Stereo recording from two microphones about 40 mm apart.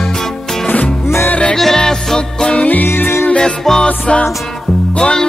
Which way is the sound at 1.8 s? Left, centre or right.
Centre.